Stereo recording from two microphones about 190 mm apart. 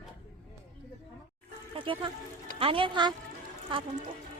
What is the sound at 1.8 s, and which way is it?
Speech, 25° right (ahead or behind).